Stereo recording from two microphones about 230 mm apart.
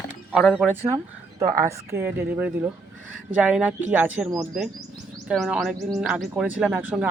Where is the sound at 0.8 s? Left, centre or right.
Centre.